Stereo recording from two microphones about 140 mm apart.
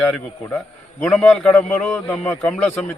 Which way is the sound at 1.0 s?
Centre (ahead or behind).